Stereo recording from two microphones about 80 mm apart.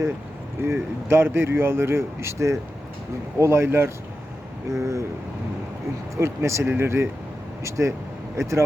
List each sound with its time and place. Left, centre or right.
0.6 s speech: right
6.1 s speech: right